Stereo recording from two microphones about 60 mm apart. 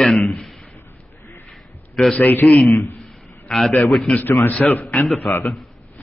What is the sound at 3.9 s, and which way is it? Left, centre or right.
Speech, centre.